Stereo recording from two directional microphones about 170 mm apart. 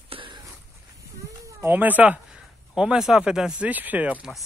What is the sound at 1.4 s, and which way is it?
Speech, 10° right (ahead or behind).